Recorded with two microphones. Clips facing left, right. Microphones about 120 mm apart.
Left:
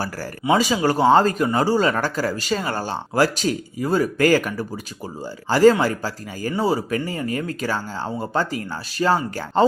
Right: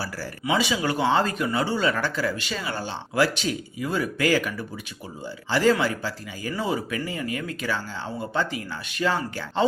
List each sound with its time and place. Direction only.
0.5 s speech: 40° left (ahead or behind)